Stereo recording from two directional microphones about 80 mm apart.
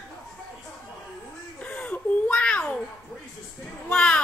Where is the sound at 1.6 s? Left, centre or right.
Centre.